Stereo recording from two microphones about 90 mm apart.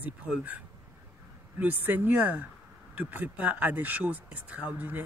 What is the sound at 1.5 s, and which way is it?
Speech, 20° right (ahead or behind).